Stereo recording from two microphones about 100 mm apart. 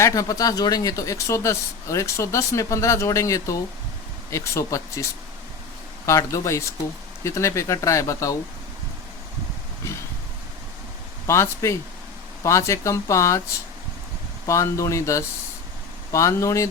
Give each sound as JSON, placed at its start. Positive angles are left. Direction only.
{"t": 0.0, "sound": "speech", "side_deg": 35}
{"t": 6.1, "sound": "speech", "side_deg": 30}
{"t": 11.3, "sound": "speech", "side_deg": 30}
{"t": 14.4, "sound": "speech", "side_deg": 30}